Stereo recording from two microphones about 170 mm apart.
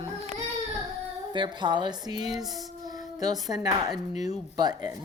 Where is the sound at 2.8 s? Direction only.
20° right (ahead or behind).